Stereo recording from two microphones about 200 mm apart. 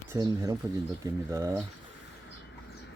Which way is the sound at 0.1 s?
20° right (ahead or behind).